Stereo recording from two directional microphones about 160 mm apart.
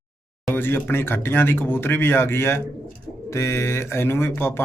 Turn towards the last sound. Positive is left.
turn(degrees=15)  # may be behind; listen again after turning